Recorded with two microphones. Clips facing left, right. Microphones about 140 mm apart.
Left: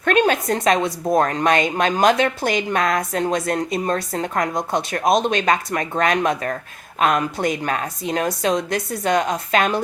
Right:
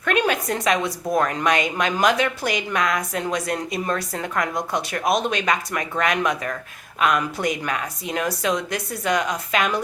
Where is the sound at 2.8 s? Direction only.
45° left (ahead or behind).